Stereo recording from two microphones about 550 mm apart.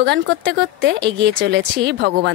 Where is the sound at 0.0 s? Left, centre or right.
Centre.